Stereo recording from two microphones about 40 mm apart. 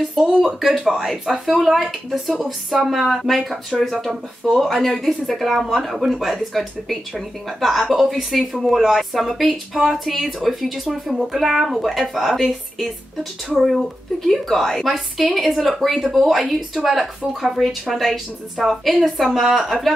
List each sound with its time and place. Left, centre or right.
0.2 s speech: centre
0.7 s speech: centre
1.4 s speech: centre
14.3 s speech: centre